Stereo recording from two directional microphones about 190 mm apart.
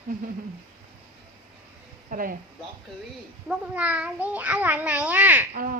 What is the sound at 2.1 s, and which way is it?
Speech, 45° right (ahead or behind).